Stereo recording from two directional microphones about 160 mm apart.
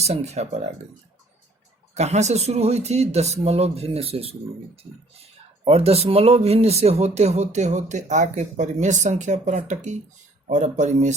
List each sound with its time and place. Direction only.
0.0 s speech: 40° right (ahead or behind)
2.0 s speech: 45° right (ahead or behind)
5.6 s speech: 40° right (ahead or behind)